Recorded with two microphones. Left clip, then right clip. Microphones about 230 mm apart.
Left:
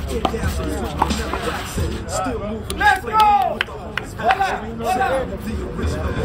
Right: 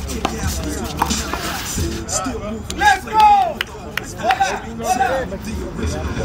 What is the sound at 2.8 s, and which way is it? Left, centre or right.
Speech, left.